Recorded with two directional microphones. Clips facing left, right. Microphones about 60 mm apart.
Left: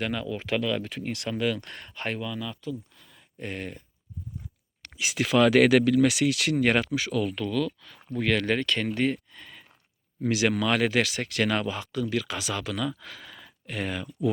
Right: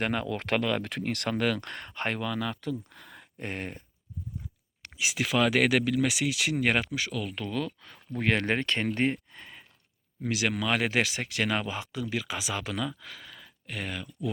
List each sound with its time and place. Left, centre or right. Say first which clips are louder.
0.0 s speech: right 1 dB; right
0.3 s speech: even; right
0.9 s speech: right 1 dB; right
3.3 s speech: left 1 dB; right
4.8 s speech: left 2 dB; centre
7.3 s speech: left 5 dB; right
10.2 s speech: left 5 dB; centre